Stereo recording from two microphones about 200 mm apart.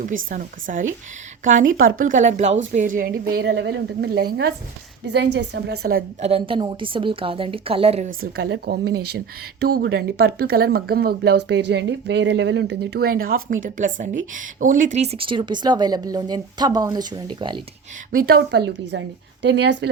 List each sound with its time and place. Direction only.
0.3 s speech: 40° right (ahead or behind)
5.0 s a woman's voice: 60° right (ahead or behind)
6.2 s speech: 30° right (ahead or behind)
8.2 s speech: 65° right (ahead or behind)
13.3 s speech: 45° right (ahead or behind); by 17.6 s 25° right (ahead or behind)
18.1 s speech: 50° right (ahead or behind)
18.9 s a woman's voice: 65° right (ahead or behind)